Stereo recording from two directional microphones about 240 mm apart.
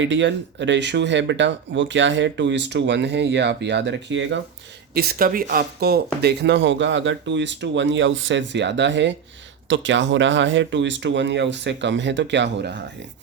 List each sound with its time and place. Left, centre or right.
0.0 s speech: right
4.9 s speech: right